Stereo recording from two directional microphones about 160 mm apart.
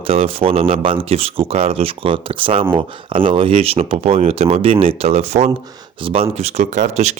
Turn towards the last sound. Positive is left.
turn(degrees=-45)  # may be behind; listen again after turning